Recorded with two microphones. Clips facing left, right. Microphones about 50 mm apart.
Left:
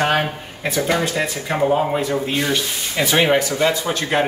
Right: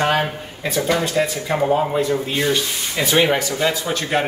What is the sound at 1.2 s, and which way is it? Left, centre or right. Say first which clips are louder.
A man's voice: right 1 dB; centre.